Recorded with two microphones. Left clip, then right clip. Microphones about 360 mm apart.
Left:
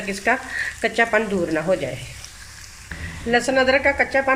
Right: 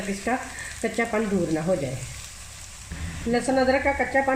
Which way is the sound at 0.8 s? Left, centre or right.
Left.